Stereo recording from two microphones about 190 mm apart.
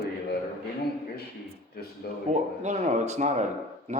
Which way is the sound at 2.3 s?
35° right (ahead or behind).